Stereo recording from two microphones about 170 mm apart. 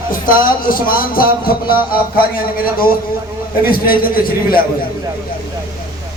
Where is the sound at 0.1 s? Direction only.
55° left (ahead or behind).